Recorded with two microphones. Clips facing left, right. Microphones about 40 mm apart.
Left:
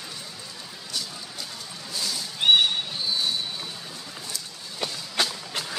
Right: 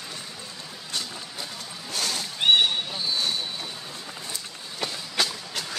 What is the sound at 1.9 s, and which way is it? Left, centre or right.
Cat, right.